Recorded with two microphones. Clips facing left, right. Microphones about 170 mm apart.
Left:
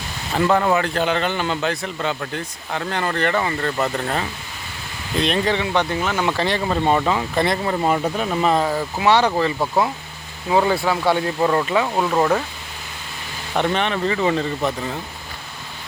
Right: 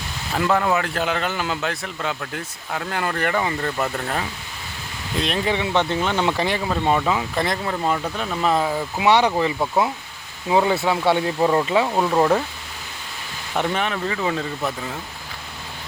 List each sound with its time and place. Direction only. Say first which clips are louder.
0.3 s a man's voice: left 2 dB; centre (ahead or behind)
5.5 s speech: even; 20° right (ahead or behind)
6.4 s a man's voice: left 2 dB; 10° right (ahead or behind)
7.8 s speech: left 4 dB; 20° left (ahead or behind)
8.2 s a man's voice: even; 5° left (ahead or behind)
9.0 s speech: even; 15° right (ahead or behind)
10.5 s speech: left 1 dB; 20° right (ahead or behind)
11.3 s speech: even; 15° right (ahead or behind)
11.9 s speech: even; 5° right (ahead or behind)
13.6 s a man's voice: left 3 dB; 5° right (ahead or behind)